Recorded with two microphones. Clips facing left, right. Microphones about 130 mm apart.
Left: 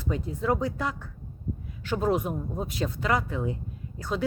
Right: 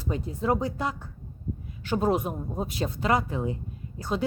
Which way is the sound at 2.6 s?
30° right (ahead or behind).